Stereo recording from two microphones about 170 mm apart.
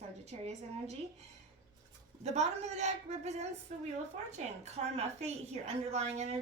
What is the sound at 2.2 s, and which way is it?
A woman's voice, 40° right (ahead or behind).